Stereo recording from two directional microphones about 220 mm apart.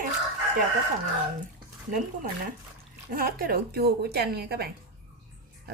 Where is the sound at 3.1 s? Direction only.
40° right (ahead or behind).